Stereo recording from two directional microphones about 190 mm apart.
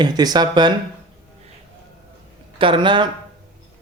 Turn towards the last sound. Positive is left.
turn(degrees=-25)  # may be behind; listen again after turning